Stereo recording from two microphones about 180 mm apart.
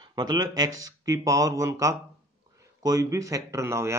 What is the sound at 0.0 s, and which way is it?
Speech, 25° right (ahead or behind).